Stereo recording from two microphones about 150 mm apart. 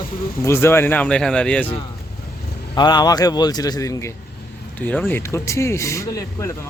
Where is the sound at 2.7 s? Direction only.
30° left (ahead or behind).